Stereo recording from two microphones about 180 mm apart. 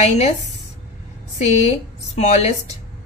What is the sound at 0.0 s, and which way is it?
Speech, 40° left (ahead or behind).